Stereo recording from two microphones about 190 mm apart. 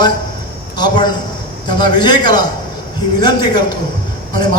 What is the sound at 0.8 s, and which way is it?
A man's voice, 20° left (ahead or behind).